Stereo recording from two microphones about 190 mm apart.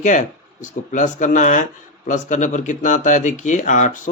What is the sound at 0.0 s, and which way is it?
Speech, 40° left (ahead or behind).